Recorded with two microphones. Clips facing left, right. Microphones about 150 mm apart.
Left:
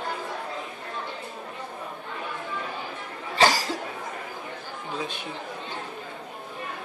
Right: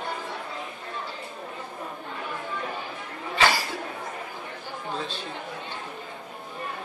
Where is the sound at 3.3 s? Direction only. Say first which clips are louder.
Left 2 dB; 40° left (ahead or behind).